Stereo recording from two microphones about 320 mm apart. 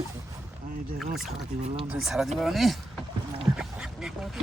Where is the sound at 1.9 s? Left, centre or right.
Centre.